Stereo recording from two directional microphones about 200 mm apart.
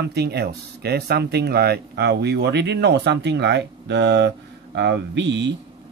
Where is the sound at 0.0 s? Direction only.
55° right (ahead or behind).